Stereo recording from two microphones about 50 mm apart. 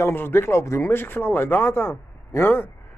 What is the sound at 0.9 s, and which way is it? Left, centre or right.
A man's voice, left.